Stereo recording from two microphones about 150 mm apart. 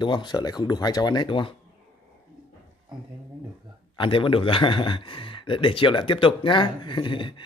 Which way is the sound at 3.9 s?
35° left (ahead or behind).